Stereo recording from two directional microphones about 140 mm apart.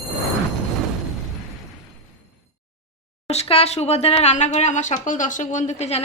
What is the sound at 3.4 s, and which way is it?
A woman's voice, 45° left (ahead or behind).